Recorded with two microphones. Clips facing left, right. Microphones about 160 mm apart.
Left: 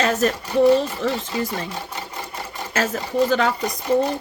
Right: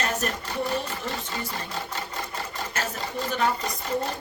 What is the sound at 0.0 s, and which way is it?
Speech, 90° left.